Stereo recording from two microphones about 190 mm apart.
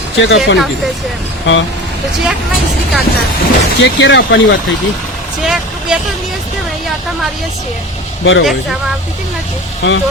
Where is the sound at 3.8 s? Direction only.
65° left (ahead or behind).